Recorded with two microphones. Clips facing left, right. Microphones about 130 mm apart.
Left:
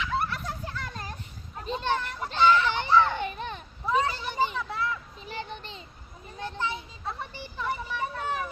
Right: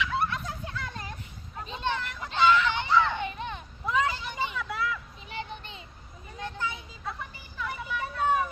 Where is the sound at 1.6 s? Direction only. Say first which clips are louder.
Left 3 dB; 35° left (ahead or behind).